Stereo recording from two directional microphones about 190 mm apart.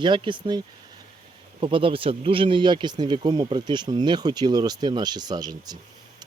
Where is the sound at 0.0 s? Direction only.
25° right (ahead or behind).